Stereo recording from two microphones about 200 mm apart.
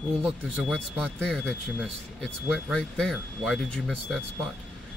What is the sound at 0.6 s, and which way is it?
Speech, 5° left (ahead or behind).